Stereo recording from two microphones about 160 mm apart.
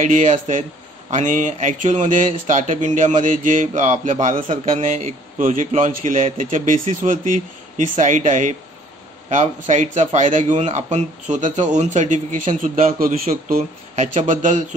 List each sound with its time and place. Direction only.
0.0 s a man's voice: 50° right (ahead or behind)
4.5 s a man's voice: 40° right (ahead or behind)